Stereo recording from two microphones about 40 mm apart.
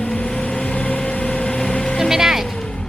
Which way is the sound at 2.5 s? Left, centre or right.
Centre.